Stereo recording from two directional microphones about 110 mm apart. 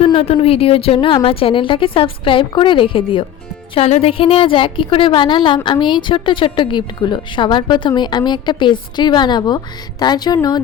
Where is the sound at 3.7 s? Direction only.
65° left (ahead or behind).